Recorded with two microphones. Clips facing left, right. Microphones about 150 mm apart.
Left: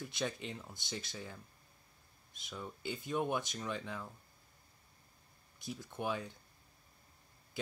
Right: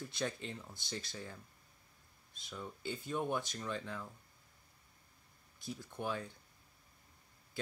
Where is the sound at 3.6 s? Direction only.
10° left (ahead or behind).